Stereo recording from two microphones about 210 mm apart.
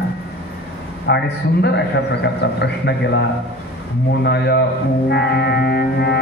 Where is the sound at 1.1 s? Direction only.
55° left (ahead or behind).